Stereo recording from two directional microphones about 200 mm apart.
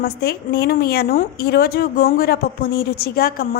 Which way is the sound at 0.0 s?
50° left (ahead or behind).